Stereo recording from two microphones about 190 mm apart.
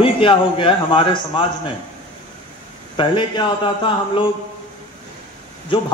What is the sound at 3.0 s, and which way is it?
Speech, 25° left (ahead or behind).